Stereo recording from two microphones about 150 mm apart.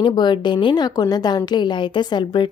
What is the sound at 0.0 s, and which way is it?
A woman's voice, 30° left (ahead or behind).